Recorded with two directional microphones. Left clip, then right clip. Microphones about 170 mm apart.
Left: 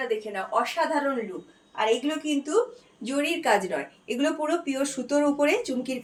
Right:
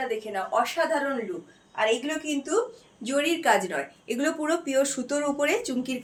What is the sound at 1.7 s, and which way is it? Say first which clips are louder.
A woman's voice: even; 20° right (ahead or behind).